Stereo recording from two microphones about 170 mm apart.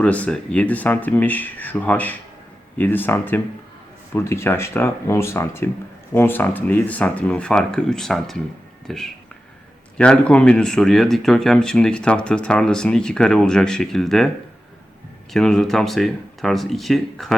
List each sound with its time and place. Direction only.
0.0 s speech: 5° left (ahead or behind)
15.3 s speech: centre (ahead or behind)